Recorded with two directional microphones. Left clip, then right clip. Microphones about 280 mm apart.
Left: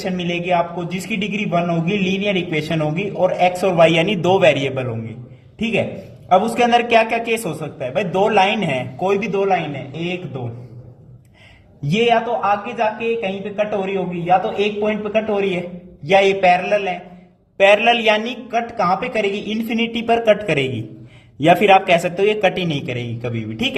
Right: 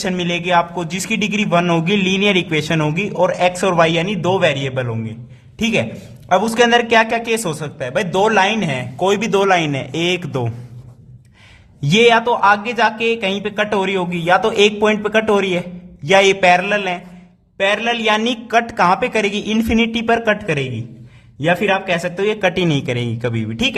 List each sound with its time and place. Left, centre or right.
0.0 s a man's voice: right
9.0 s a man's voice: right
11.9 s a man's voice: right